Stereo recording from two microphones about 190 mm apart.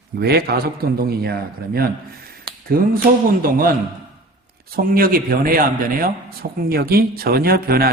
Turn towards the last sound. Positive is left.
turn(degrees=-55)  # may be behind; listen again after turning